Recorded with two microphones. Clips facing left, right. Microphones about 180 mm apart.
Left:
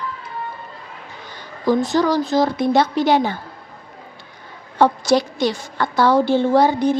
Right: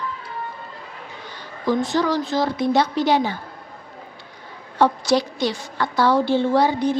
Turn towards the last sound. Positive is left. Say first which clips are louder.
# left 3 dB
turn(degrees=45)  # may be behind; listen again after turning